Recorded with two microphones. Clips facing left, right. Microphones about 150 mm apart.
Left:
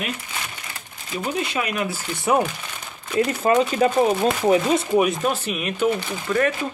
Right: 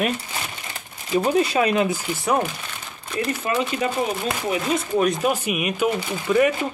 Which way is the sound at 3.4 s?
35° left (ahead or behind).